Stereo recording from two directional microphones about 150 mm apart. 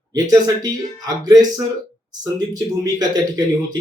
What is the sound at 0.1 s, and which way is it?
Speech, 25° right (ahead or behind).